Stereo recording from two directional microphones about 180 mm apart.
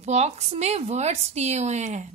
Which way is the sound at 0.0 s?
40° right (ahead or behind).